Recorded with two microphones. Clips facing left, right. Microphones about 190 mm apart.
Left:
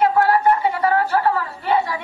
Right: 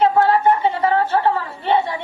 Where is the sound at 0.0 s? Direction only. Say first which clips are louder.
Right 1 dB; 25° right (ahead or behind).